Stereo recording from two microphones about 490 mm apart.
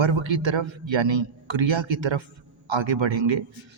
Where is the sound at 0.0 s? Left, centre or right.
Right.